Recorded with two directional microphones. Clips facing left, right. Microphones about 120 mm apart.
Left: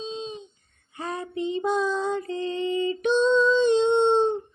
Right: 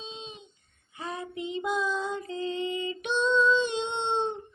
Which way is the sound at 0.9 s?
40° left (ahead or behind).